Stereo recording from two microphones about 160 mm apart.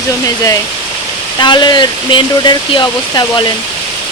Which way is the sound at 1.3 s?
30° left (ahead or behind).